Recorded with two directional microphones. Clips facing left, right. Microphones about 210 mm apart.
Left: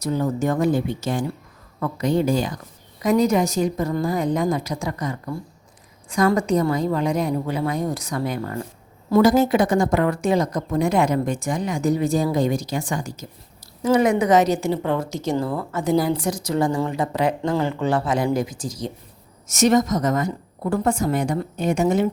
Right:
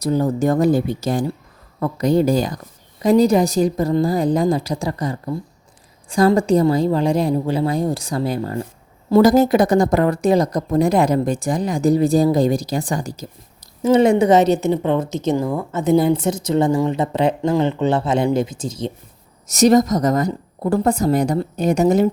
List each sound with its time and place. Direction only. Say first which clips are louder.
0.0 s speech: right 4 dB; 35° right (ahead or behind)
19.5 s speech: right 4 dB; 35° right (ahead or behind)